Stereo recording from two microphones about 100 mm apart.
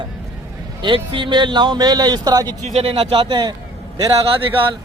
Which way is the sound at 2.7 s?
80° right.